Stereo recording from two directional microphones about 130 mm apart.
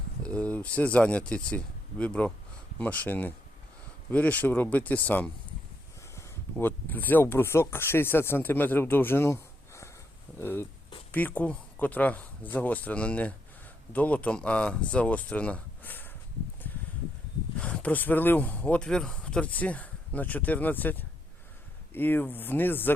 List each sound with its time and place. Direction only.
0.2 s speech: 10° left (ahead or behind)
16.7 s a sound: 15° left (ahead or behind)
17.6 s speech: 10° left (ahead or behind)